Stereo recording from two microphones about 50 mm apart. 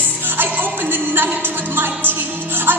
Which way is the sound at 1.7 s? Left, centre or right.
Right.